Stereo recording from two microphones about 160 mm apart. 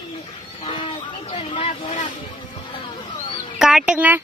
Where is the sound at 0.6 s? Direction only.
35° left (ahead or behind).